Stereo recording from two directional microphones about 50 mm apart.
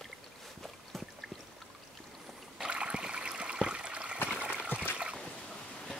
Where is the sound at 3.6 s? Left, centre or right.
Right.